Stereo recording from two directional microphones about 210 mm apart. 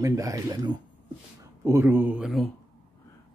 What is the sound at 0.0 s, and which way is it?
Speech, 15° right (ahead or behind).